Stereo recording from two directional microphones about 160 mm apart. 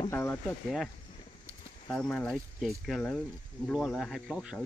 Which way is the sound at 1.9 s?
5° left (ahead or behind).